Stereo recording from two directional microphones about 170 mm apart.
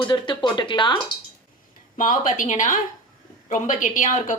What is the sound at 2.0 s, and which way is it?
Speech, 50° left (ahead or behind).